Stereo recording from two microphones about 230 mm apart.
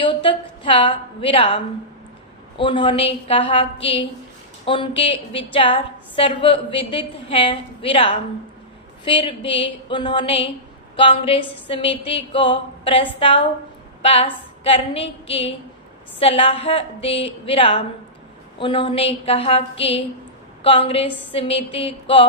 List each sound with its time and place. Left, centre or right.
0.0 s a woman's voice: left